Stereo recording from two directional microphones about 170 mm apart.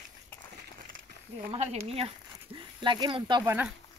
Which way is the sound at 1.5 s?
40° right (ahead or behind).